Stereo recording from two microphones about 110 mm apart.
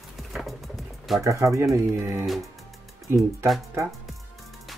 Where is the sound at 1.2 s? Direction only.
30° right (ahead or behind).